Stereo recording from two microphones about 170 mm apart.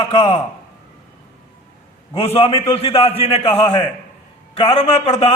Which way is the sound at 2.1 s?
35° left (ahead or behind).